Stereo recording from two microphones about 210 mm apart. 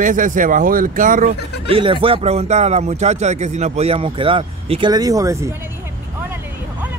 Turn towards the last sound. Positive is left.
turn(degrees=-15)  # may be behind; listen again after turning